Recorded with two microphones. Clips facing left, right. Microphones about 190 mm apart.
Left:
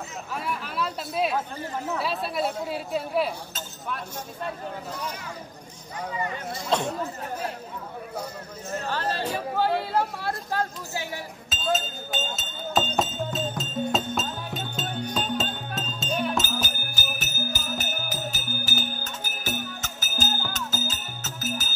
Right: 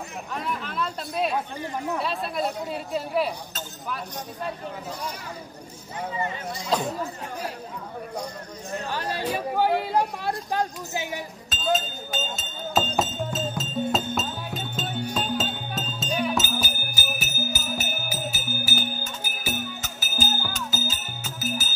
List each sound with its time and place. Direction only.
0.3 s speech: 5° left (ahead or behind)
6.5 s speech: centre (ahead or behind)
8.7 s speech: 15° right (ahead or behind)
11.5 s music: centre (ahead or behind)